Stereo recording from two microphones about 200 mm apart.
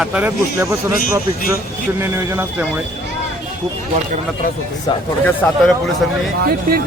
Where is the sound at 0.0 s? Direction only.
5° right (ahead or behind).